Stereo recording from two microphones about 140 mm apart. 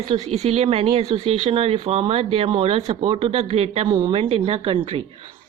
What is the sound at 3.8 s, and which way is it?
Speech, 35° right (ahead or behind).